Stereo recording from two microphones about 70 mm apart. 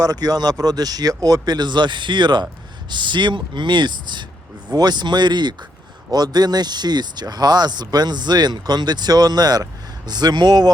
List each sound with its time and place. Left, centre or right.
0.0 s speech: right
4.7 s speech: right
6.1 s speech: right
10.1 s speech: right